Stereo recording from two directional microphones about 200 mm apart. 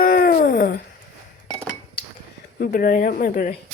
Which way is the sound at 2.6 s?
45° left (ahead or behind).